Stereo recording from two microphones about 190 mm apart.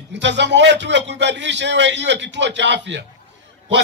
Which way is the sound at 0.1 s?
65° right (ahead or behind).